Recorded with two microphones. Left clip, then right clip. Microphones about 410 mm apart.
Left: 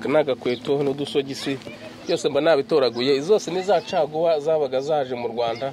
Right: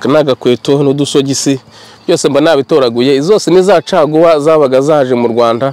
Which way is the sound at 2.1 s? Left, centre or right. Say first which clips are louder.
Right 11 dB; right.